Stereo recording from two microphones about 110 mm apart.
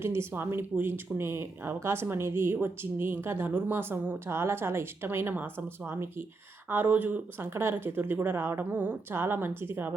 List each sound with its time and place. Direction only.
0.0 s speech: 20° right (ahead or behind)